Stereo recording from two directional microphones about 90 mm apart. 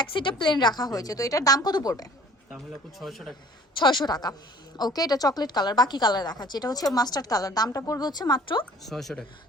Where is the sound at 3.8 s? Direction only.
60° left (ahead or behind).